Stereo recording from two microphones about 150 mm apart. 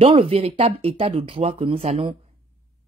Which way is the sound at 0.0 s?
40° right (ahead or behind).